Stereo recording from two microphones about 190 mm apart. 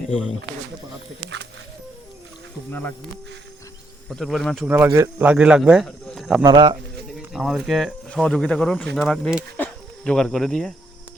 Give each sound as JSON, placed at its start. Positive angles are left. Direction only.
{"t": 4.1, "sound": "speech", "side_deg": 0}
{"t": 4.7, "sound": "speech", "side_deg": -10}
{"t": 6.4, "sound": "speech", "side_deg": -20}
{"t": 7.2, "sound": "speech", "side_deg": 0}